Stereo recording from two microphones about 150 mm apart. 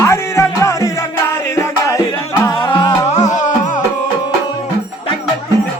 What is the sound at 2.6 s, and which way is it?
Music, 35° left (ahead or behind).